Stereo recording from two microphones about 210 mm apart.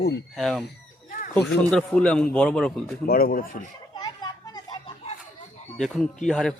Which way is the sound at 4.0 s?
20° left (ahead or behind).